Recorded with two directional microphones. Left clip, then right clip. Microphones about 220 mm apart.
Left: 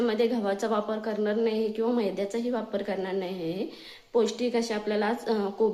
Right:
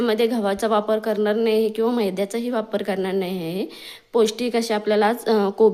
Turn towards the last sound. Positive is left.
turn(degrees=-50)  # may be behind; listen again after turning